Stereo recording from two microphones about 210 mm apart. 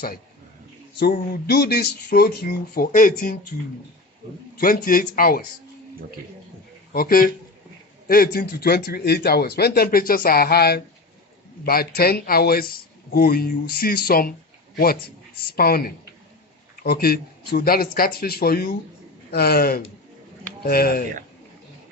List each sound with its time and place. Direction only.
0.9 s a man's voice: 45° left (ahead or behind)
4.6 s a man's voice: 40° left (ahead or behind)
6.9 s a man's voice: 45° left (ahead or behind)